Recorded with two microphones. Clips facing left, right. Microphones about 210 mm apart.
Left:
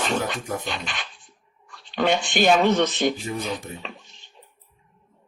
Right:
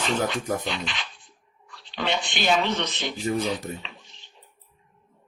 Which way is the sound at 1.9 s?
50° left (ahead or behind).